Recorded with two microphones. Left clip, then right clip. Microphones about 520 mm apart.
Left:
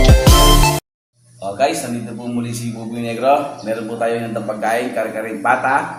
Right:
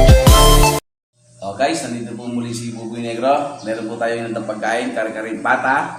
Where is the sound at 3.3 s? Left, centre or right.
Left.